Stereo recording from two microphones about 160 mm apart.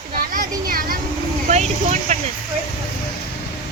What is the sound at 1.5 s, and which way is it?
Vehicle, 45° right (ahead or behind).